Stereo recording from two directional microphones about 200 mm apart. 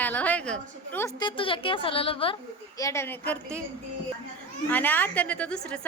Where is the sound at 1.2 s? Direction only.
25° left (ahead or behind).